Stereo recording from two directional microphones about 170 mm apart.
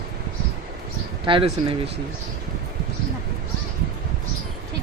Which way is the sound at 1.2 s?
30° right (ahead or behind).